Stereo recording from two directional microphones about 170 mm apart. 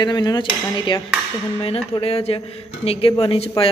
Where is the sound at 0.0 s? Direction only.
25° left (ahead or behind).